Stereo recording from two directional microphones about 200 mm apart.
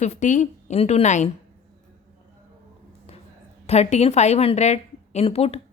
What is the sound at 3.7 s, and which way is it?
A woman's voice, 35° left (ahead or behind).